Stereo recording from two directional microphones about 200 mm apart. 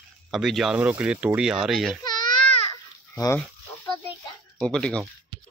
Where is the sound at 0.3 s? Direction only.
Centre (ahead or behind).